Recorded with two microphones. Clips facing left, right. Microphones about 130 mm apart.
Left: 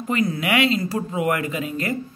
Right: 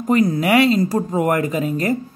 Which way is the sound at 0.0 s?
40° right (ahead or behind).